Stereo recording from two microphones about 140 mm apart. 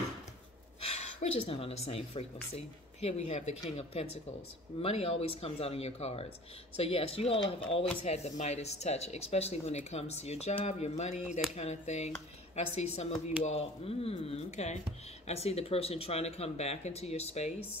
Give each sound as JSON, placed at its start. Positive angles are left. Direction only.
{"t": 0.8, "sound": "speech", "side_deg": 50}